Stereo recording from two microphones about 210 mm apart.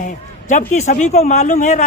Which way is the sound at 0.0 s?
35° left (ahead or behind).